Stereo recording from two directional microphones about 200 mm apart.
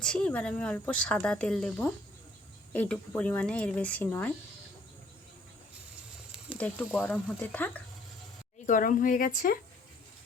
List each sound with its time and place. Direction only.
0.0 s speech: 5° left (ahead or behind)
6.6 s speech: 10° left (ahead or behind)
8.6 s a woman's voice: 40° left (ahead or behind)